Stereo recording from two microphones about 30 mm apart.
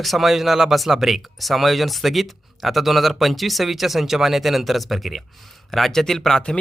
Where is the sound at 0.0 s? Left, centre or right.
Centre.